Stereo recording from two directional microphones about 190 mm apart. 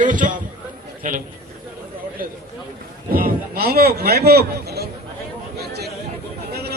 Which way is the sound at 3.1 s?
50° right (ahead or behind).